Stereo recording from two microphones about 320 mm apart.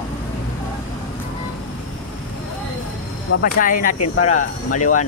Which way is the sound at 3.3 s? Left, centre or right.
Left.